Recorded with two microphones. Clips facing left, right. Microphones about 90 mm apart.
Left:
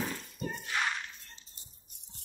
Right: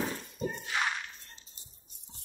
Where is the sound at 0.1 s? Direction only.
20° right (ahead or behind).